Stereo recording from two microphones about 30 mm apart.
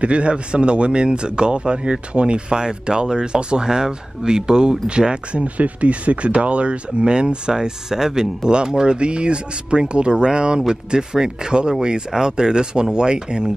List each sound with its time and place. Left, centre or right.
0.0 s a man's voice: right; by 8.5 s centre
8.5 s a man's voice: right